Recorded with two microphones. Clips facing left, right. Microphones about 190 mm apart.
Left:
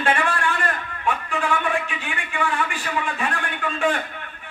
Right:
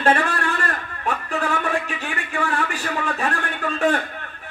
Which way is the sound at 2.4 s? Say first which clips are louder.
Even; 40° right (ahead or behind).